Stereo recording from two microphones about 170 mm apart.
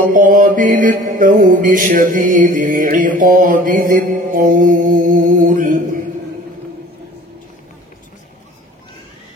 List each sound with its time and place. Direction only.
0.0 s mantra: 50° right (ahead or behind)